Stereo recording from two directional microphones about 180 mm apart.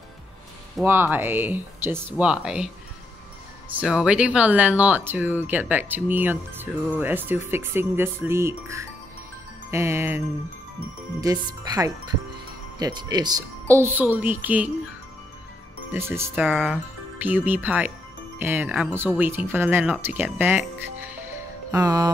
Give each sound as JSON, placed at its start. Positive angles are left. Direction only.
{"t": 0.8, "sound": "speech", "side_deg": -10}
{"t": 3.7, "sound": "speech", "side_deg": -5}
{"t": 15.9, "sound": "speech", "side_deg": -10}